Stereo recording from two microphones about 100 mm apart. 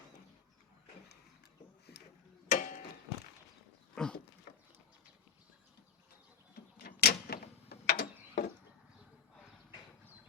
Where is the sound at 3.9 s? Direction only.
10° left (ahead or behind).